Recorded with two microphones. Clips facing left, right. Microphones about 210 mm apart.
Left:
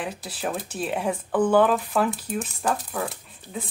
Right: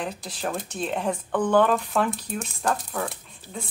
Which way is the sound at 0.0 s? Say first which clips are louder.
Even; 5° left (ahead or behind).